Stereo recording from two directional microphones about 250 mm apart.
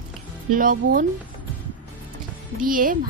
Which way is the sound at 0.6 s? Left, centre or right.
Right.